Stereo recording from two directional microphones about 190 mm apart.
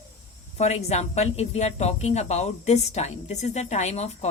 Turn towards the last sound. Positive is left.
turn(degrees=35)  # may be behind; listen again after turning